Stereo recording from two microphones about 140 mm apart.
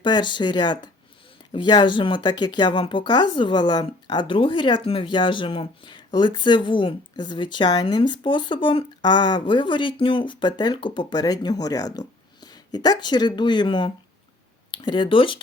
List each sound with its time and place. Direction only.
0.0 s speech: 35° left (ahead or behind)